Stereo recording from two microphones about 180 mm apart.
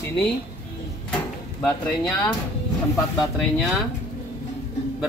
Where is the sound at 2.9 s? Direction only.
20° left (ahead or behind).